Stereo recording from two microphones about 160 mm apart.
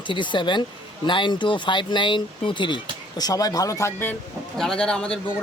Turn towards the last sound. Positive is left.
turn(degrees=5)  # may be behind; listen again after turning